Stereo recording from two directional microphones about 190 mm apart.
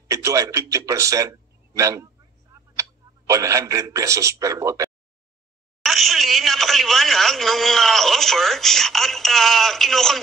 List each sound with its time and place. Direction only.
0.1 s a man's voice: 15° right (ahead or behind)
5.8 s telephone dialing: centre (ahead or behind)